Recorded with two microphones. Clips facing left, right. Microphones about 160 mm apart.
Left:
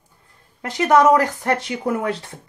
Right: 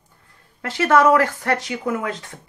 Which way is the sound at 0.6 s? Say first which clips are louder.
Left 1 dB; 20° left (ahead or behind).